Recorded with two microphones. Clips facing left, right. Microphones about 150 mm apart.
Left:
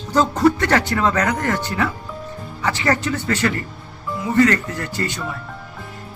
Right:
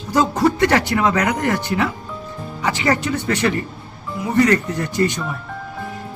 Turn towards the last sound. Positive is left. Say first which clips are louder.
# right 6 dB
turn(degrees=-15)  # may be behind; listen again after turning